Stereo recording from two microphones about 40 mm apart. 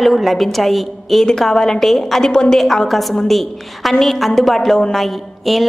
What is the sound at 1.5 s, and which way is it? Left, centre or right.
A woman's voice, centre.